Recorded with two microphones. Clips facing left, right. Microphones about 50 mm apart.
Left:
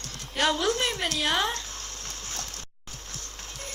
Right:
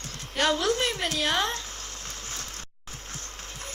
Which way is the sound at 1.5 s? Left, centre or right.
Right.